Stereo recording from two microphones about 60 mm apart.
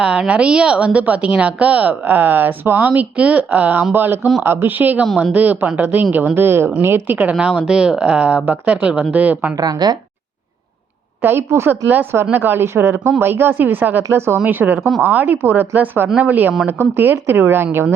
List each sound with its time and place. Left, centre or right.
0.0 s a woman's voice: centre; by 7.2 s right
7.3 s a woman's voice: centre
11.2 s a woman's voice: right
14.8 s speech: centre
15.0 s a woman's voice: right
15.3 s a woman's voice: right